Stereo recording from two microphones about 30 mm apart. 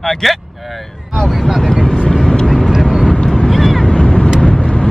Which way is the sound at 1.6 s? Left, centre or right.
Left.